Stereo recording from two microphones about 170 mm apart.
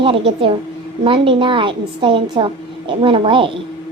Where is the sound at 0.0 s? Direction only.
30° right (ahead or behind).